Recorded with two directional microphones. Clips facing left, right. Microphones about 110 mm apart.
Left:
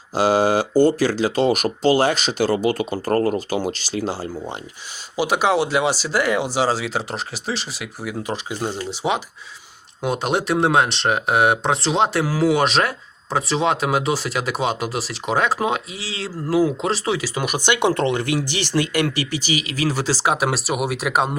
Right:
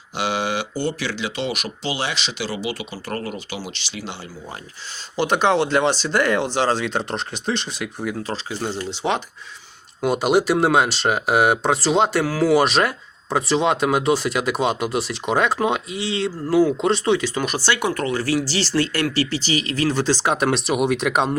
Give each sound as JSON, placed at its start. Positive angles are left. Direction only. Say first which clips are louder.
{"t": 0.1, "sound": "speech", "louder": "left 7 dB", "side_deg": 40}
{"t": 5.1, "sound": "speech", "louder": "even", "side_deg": 10}
{"t": 8.2, "sound": "speech", "louder": "left 1 dB", "side_deg": 15}